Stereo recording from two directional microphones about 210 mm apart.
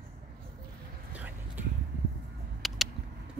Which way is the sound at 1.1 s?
10° right (ahead or behind).